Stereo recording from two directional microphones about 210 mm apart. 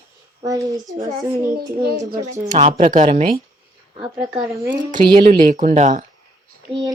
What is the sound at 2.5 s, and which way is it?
Speech, 35° right (ahead or behind).